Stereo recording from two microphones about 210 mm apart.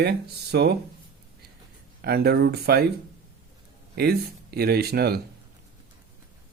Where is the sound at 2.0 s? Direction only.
50° right (ahead or behind).